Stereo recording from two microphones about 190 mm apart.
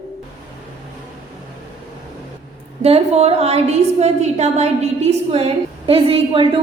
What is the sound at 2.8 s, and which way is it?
A woman's voice, 35° right (ahead or behind).